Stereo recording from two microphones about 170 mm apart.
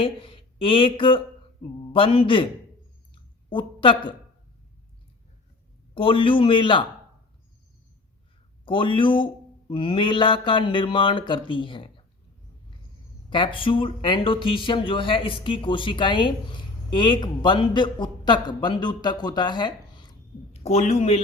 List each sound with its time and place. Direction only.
0.0 s speech: 30° left (ahead or behind)
3.5 s speech: 30° left (ahead or behind)
5.9 s speech: 30° left (ahead or behind)
8.6 s speech: 30° left (ahead or behind)
13.3 s speech: 30° left (ahead or behind)
20.5 s speech: 40° left (ahead or behind)